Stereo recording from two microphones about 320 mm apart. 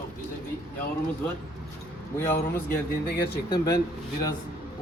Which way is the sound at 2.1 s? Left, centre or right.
Centre.